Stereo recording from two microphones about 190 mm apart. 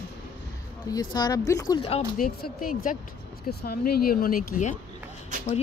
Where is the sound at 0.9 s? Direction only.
20° left (ahead or behind).